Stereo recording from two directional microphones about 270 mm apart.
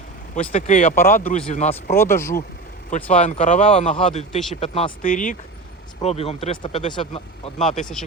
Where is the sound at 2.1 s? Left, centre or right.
Centre.